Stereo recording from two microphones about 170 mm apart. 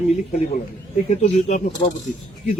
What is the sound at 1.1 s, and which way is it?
Speech, 40° left (ahead or behind).